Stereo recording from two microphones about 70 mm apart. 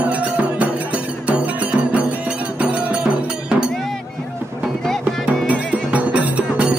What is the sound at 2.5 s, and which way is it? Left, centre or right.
Cowbell, centre.